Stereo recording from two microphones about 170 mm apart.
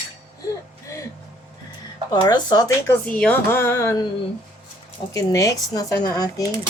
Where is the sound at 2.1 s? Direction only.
25° left (ahead or behind).